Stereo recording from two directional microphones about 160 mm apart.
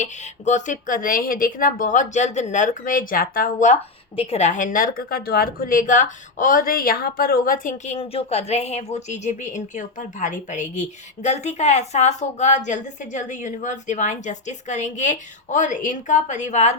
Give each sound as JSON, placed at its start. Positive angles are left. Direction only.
{"t": 0.0, "sound": "speech", "side_deg": 50}
{"t": 4.2, "sound": "a woman's voice", "side_deg": 40}